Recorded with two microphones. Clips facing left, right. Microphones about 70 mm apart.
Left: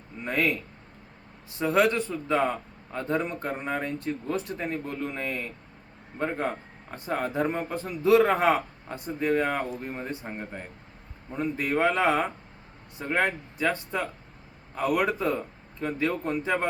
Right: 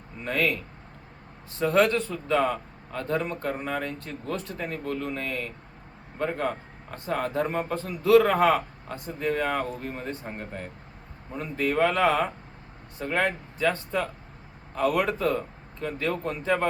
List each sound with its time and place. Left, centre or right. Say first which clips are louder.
0.3 s speech: even; centre
1.5 s speech: right 1 dB; centre
7.9 s speech: right 1 dB; left